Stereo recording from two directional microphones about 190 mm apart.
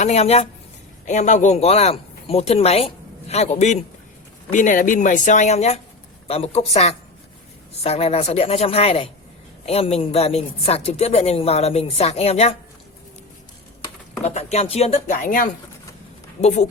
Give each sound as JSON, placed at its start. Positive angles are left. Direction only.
{"t": 0.0, "sound": "speech", "side_deg": 35}
{"t": 14.3, "sound": "speech", "side_deg": 35}
{"t": 16.4, "sound": "speech", "side_deg": 35}